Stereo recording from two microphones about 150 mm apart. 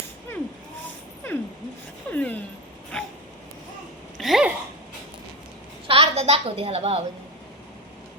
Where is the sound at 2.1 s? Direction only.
10° left (ahead or behind).